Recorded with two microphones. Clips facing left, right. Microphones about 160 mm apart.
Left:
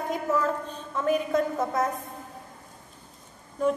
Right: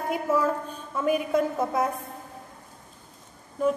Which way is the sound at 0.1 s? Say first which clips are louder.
Right 2 dB; 10° right (ahead or behind).